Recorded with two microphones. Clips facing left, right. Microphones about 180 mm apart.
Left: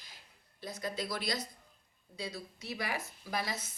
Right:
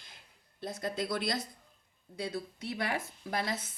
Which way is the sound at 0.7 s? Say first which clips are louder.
Right 3 dB; 50° right (ahead or behind).